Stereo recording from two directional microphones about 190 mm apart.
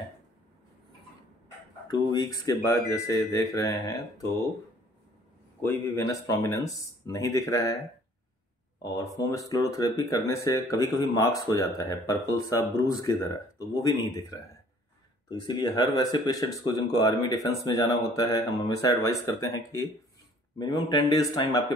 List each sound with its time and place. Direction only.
1.9 s speech: 20° left (ahead or behind)
5.6 s speech: 15° left (ahead or behind)
8.8 s speech: 15° left (ahead or behind)
15.2 s speech: 20° left (ahead or behind)